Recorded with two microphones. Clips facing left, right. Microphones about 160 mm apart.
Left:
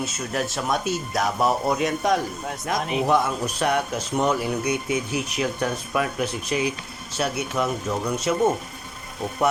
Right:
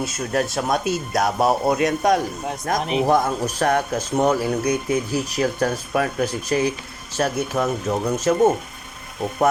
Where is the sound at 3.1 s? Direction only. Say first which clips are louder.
Right 2 dB; 40° right (ahead or behind).